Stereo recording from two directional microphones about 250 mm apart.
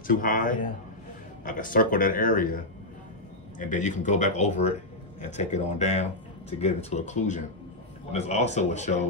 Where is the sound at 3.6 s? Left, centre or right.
Left.